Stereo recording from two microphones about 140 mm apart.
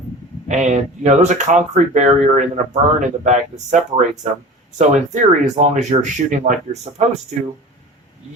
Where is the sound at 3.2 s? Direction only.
60° right (ahead or behind).